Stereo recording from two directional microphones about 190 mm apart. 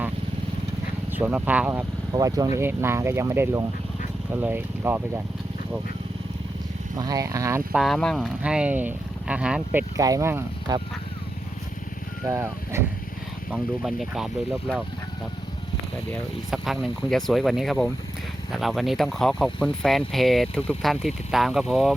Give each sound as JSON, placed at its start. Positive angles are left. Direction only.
{"t": 1.1, "sound": "speech", "side_deg": -10}
{"t": 6.9, "sound": "speech", "side_deg": -20}
{"t": 7.8, "sound": "speech", "side_deg": 0}
{"t": 10.0, "sound": "speech", "side_deg": -15}
{"t": 12.3, "sound": "speech", "side_deg": -15}
{"t": 13.5, "sound": "speech", "side_deg": 0}
{"t": 16.5, "sound": "speech", "side_deg": 0}